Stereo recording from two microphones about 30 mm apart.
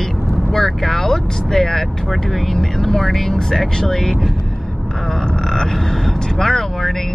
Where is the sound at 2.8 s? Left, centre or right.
Centre.